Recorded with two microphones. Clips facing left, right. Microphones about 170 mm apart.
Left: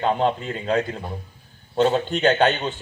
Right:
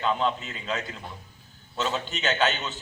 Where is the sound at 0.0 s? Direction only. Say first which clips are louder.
Left 5 dB; 45° left (ahead or behind).